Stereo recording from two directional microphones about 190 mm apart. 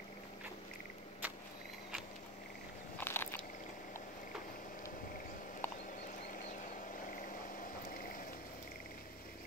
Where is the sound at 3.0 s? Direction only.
10° left (ahead or behind).